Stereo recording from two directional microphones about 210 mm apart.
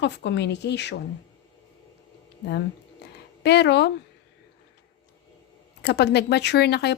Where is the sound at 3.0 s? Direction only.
55° left (ahead or behind).